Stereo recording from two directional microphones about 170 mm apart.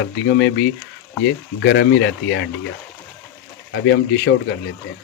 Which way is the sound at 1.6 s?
90° left.